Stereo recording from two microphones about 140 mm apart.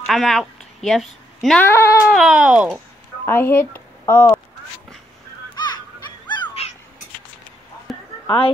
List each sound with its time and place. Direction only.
0.0 s a sound: centre (ahead or behind)
1.6 s speech: 20° left (ahead or behind)
2.1 s speech: 5° right (ahead or behind)
3.3 s speech: 15° left (ahead or behind)
5.5 s fowl: 30° left (ahead or behind)
6.2 s a sound: 30° left (ahead or behind)